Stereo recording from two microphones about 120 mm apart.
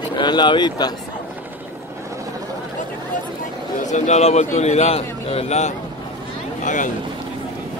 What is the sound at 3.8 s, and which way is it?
A man's voice, 75° left (ahead or behind).